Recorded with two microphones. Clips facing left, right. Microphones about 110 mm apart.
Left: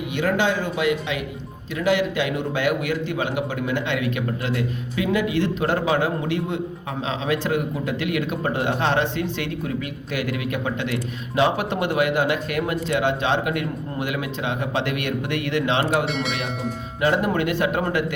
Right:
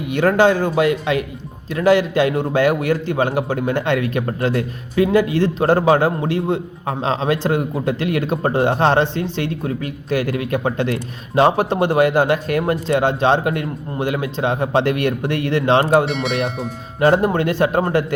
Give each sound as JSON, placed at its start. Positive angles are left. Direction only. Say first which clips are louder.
{"t": 0.1, "sound": "a man's voice", "louder": "right 8 dB", "side_deg": -45}
{"t": 16.0, "sound": "speech", "louder": "right 4 dB", "side_deg": 0}
{"t": 17.0, "sound": "a man's voice", "louder": "right 6 dB", "side_deg": -35}